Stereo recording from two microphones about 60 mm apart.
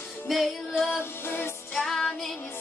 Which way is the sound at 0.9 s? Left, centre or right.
Left.